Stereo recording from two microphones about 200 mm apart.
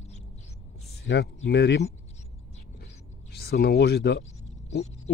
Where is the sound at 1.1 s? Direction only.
65° left (ahead or behind).